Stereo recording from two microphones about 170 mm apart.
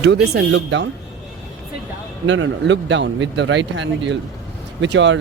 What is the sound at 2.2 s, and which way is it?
Speech, 90° right.